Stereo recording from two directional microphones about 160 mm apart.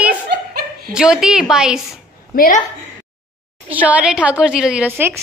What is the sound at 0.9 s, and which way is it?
Speech, 5° right (ahead or behind).